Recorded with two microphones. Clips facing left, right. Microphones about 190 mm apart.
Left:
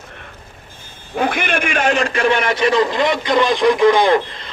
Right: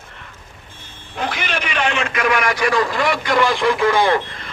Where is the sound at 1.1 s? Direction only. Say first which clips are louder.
Left 5 dB; 55° left (ahead or behind).